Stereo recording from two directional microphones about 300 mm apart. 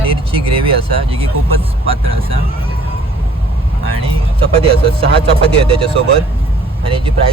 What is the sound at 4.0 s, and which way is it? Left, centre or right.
Speech, centre.